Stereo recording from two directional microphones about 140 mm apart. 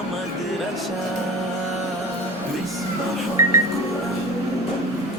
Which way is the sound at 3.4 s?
20° right (ahead or behind).